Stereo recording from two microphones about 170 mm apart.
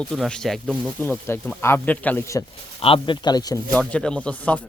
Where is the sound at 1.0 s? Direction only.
15° left (ahead or behind).